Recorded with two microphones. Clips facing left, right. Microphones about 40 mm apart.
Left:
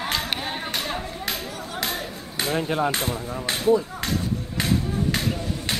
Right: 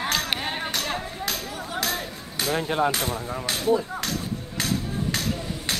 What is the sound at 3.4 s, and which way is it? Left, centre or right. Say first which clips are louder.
Speech: left 4 dB; left.